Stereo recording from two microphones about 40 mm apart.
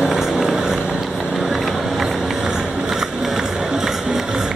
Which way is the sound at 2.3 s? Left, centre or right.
Centre.